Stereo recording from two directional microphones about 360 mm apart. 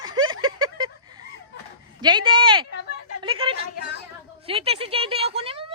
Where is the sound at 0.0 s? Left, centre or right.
Right.